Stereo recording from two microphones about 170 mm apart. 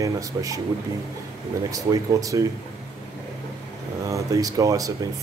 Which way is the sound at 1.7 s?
20° right (ahead or behind).